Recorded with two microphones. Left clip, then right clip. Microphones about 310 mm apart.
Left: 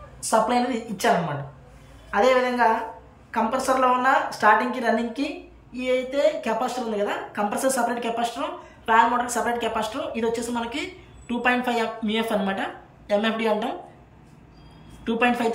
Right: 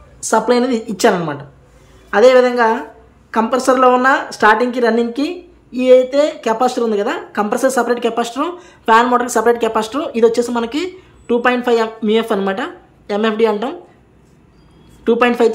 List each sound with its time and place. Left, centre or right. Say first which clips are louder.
0.2 s a woman's voice: right 7 dB; centre
2.1 s a woman's voice: right 10 dB; centre
15.0 s a woman's voice: right 10 dB; centre